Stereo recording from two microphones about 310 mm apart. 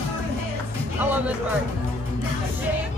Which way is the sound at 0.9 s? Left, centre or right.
Centre.